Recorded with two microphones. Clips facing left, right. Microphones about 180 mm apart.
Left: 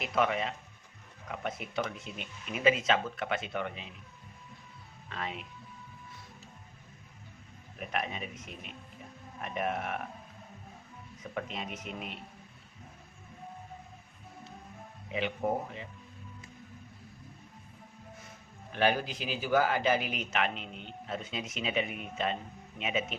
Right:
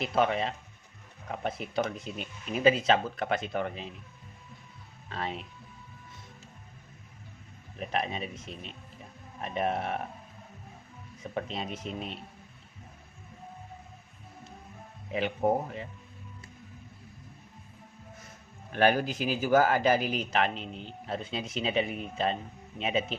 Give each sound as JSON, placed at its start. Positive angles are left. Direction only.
{"t": 0.0, "sound": "a man's voice", "side_deg": -30}
{"t": 5.0, "sound": "speech", "side_deg": -35}
{"t": 7.8, "sound": "a man's voice", "side_deg": -30}
{"t": 11.2, "sound": "a man's voice", "side_deg": -30}
{"t": 15.1, "sound": "a man's voice", "side_deg": -40}
{"t": 18.7, "sound": "a man's voice", "side_deg": -45}